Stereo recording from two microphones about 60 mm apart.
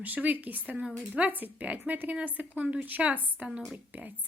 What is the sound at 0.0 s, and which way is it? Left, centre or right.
Speech, right.